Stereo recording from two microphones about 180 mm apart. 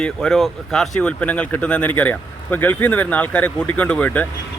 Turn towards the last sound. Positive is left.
turn(degrees=10)  # may be behind; listen again after turning